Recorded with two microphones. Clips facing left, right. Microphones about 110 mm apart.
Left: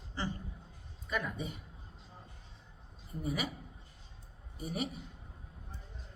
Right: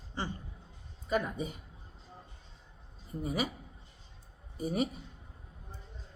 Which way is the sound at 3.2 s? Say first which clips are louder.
Right 3 dB; 35° right (ahead or behind).